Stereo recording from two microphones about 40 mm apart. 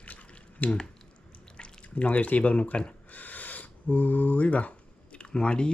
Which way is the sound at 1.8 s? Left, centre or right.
Left.